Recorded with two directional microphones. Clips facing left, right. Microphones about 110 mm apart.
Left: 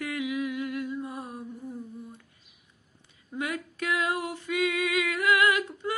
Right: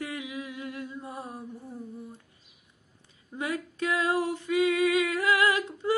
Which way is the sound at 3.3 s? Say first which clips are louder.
Even; 30° right (ahead or behind).